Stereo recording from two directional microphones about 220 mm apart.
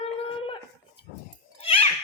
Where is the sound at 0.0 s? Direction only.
25° left (ahead or behind).